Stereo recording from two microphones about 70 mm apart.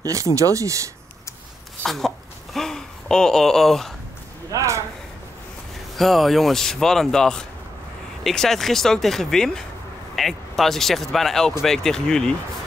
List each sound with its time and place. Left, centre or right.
0.0 s speech: right
1.9 s speech: centre
4.5 s speech: right
5.9 s speech: centre